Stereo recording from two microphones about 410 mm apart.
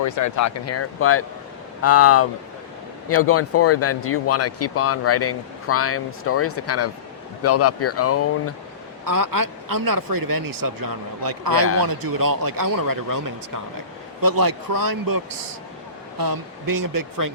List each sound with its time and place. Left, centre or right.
0.0 s speech: left
9.0 s speech: right